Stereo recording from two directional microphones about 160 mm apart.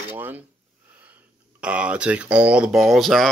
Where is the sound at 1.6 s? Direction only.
5° right (ahead or behind).